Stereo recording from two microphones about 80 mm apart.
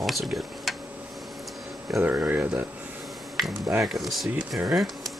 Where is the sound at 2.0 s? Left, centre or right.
Right.